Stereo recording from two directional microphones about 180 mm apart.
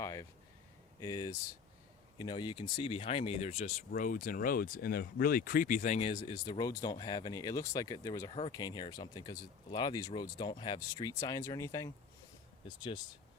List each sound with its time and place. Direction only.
0.0 s a sound: 15° left (ahead or behind)
0.9 s speech: 20° left (ahead or behind)
3.9 s speech: 50° left (ahead or behind)
6.0 s speech: 25° left (ahead or behind)
8.3 s speech: 30° left (ahead or behind)